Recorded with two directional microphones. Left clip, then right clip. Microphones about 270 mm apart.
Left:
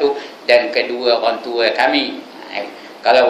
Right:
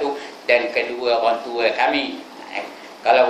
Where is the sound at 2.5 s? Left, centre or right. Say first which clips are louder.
Left 4 dB; left.